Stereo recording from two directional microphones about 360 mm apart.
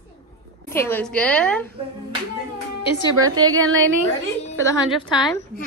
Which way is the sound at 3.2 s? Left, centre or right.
Centre.